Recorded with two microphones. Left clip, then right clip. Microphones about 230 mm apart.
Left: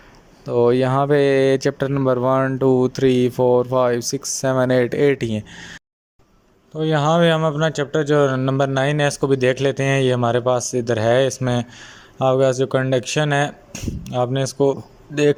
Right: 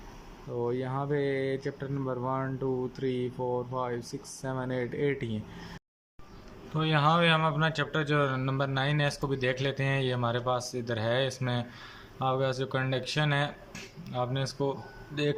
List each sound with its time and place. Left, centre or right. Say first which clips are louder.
0.5 s speech: left 16 dB; left
6.7 s a man's voice: left 8 dB; left